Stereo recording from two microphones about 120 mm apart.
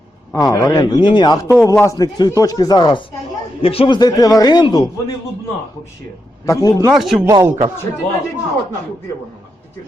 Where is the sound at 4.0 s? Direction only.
30° left (ahead or behind).